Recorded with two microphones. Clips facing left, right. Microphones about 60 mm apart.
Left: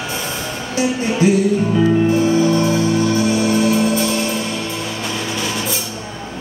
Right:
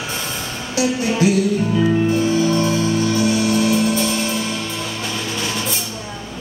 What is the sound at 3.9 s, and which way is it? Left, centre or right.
Music, centre.